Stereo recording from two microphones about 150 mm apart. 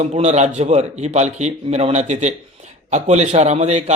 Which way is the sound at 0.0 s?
50° right (ahead or behind).